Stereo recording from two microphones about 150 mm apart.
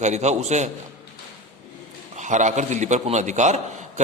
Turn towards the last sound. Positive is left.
turn(degrees=-50)  # may be behind; listen again after turning